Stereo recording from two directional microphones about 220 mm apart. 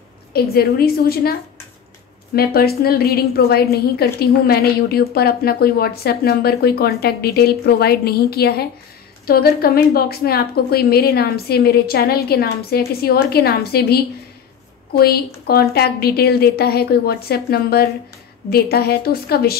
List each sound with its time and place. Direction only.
0.3 s a woman's voice: 45° left (ahead or behind)
2.3 s a woman's voice: 45° left (ahead or behind)